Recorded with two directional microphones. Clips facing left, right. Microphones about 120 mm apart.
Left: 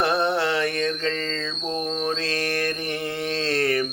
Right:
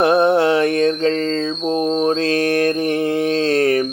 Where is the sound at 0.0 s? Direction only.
50° right (ahead or behind).